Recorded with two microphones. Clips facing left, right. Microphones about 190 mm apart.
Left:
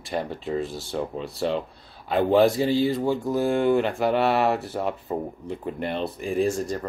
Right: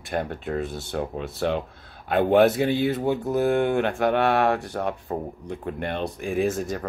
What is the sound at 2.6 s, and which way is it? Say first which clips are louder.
Speech: left 1 dB; 65° right (ahead or behind).